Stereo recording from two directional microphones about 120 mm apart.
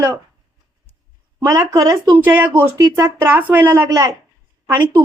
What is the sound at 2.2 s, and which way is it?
Speech, 15° right (ahead or behind).